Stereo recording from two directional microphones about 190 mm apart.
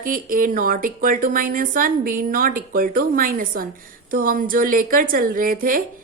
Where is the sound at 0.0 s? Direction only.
45° right (ahead or behind).